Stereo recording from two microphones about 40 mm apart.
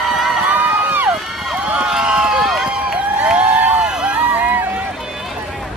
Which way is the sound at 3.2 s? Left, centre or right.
Right.